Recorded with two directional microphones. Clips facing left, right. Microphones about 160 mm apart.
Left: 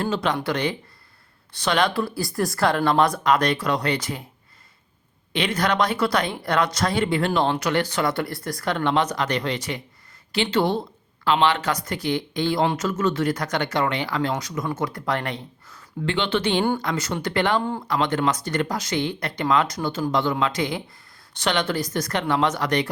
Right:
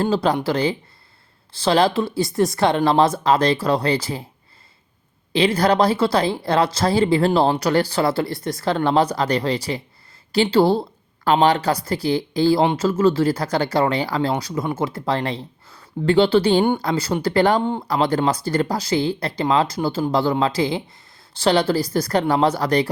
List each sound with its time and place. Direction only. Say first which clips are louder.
0.0 s speech: right 5 dB; 35° right (ahead or behind)
5.3 s speech: right 6 dB; 30° right (ahead or behind)